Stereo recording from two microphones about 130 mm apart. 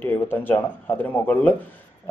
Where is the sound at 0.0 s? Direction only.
15° left (ahead or behind).